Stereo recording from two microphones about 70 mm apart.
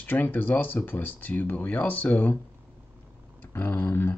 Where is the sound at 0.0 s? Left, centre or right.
Left.